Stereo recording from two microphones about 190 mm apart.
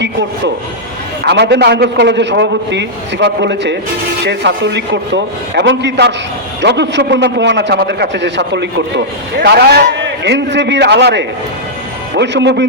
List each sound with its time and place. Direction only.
0.0 s a man's voice: 65° right (ahead or behind)